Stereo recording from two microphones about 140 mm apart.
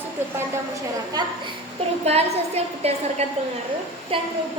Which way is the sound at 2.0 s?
50° right (ahead or behind).